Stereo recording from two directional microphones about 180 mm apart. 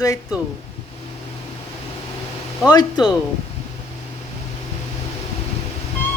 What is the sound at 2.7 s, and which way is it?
Speech, 20° left (ahead or behind).